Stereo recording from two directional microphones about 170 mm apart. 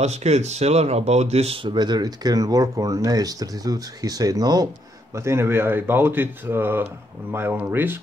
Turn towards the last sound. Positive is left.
turn(degrees=-10)  # may be behind; listen again after turning